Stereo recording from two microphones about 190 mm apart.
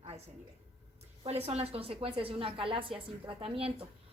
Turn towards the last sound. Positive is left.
turn(degrees=-30)  # may be behind; listen again after turning